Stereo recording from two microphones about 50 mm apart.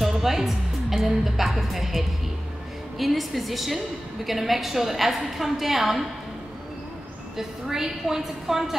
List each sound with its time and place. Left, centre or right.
0.0 s a woman's voice: centre
7.3 s a woman's voice: centre